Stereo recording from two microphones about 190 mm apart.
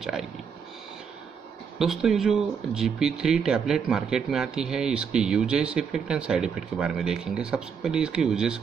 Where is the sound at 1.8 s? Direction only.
Centre (ahead or behind).